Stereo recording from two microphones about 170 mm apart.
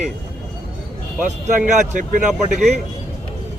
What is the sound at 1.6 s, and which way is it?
Speech, 50° right (ahead or behind).